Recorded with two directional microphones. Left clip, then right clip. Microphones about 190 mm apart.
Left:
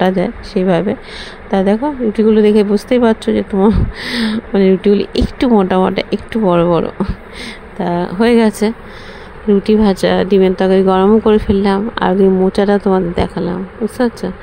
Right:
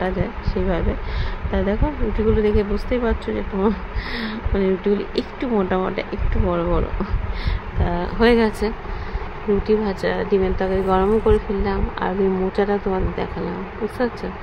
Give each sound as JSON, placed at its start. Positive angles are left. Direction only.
{"t": 0.0, "sound": "speech", "side_deg": 40}